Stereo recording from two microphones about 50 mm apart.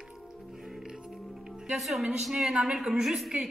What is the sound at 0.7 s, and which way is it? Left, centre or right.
Music, centre.